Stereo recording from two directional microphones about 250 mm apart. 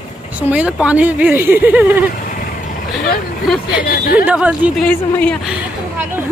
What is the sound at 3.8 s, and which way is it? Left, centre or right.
Speech, left.